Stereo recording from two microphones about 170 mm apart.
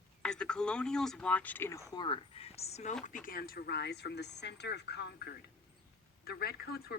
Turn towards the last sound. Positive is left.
turn(degrees=65)  # may be behind; listen again after turning